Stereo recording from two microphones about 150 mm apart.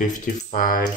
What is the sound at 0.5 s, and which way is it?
Speech, 70° left (ahead or behind).